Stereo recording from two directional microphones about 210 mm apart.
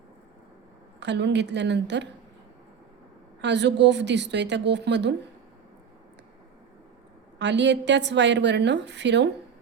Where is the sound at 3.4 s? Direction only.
55° right (ahead or behind).